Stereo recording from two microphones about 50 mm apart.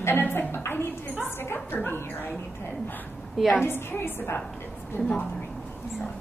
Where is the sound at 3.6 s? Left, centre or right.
Left.